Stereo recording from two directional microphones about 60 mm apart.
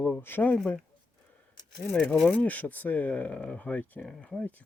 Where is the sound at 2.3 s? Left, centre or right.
Left.